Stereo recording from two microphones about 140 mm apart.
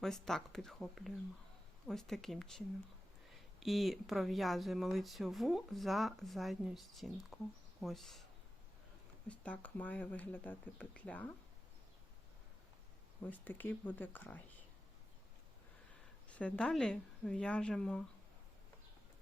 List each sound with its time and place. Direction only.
0.0 s speech: 5° left (ahead or behind)
9.3 s speech: 10° left (ahead or behind)
13.2 s speech: 10° left (ahead or behind)
16.3 s speech: 10° left (ahead or behind)